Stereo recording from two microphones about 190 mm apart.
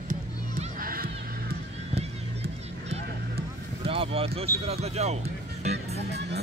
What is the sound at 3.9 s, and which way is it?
Speech, 30° right (ahead or behind).